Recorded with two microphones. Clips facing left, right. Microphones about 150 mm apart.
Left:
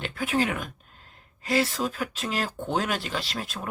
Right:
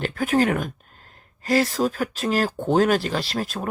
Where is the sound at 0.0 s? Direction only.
45° right (ahead or behind).